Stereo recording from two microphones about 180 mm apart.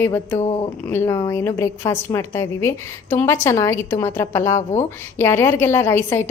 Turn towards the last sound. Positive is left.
turn(degrees=15)  # may be behind; listen again after turning